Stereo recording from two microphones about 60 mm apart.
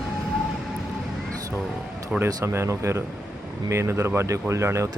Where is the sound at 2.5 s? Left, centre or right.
Right.